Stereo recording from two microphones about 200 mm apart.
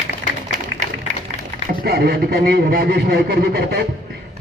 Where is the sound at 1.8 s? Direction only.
50° right (ahead or behind).